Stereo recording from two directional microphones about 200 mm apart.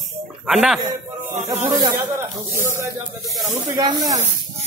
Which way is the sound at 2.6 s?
15° right (ahead or behind).